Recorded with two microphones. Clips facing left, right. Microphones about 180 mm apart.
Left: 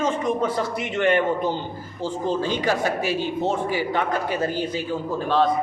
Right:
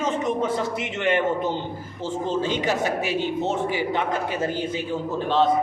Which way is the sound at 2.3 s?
20° right (ahead or behind).